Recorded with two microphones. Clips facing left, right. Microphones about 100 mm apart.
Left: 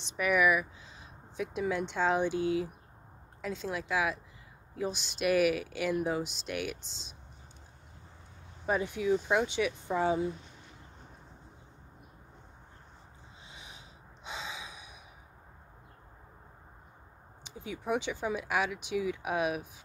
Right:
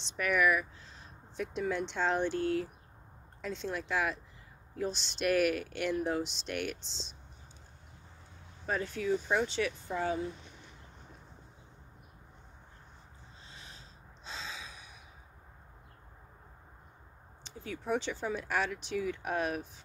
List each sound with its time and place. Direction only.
0.0 s speech: 5° left (ahead or behind)
8.6 s speech: 15° left (ahead or behind)
13.5 s gasp: 15° left (ahead or behind)
17.4 s speech: 15° left (ahead or behind)